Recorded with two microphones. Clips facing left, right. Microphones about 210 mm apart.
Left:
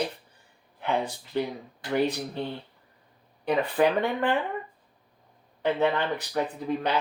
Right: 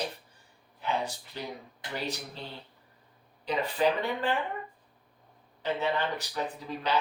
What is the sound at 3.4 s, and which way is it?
Speech, 55° left (ahead or behind).